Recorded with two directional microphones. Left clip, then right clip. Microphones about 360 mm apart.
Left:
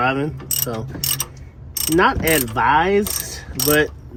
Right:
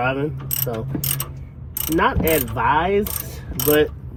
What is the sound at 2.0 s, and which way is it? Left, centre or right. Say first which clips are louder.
Speech: left 2 dB; left.